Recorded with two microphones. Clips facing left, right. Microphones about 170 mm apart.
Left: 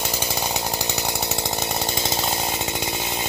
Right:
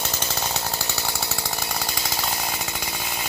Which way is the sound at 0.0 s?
15° left (ahead or behind).